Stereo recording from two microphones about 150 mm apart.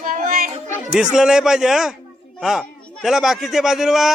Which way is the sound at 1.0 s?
5° right (ahead or behind).